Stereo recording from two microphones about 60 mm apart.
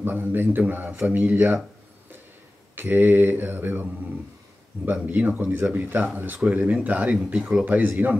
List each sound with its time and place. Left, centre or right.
0.0 s speech: right
2.7 s speech: right
4.8 s a man's voice: right